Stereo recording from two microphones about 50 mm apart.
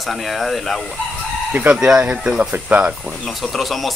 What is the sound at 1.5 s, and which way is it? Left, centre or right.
Speech, right.